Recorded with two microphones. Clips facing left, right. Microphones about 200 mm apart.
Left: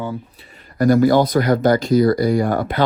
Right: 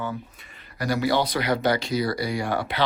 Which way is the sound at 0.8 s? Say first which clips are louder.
Left 10 dB; 50° left (ahead or behind).